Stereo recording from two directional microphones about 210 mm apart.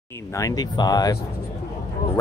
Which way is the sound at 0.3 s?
15° left (ahead or behind).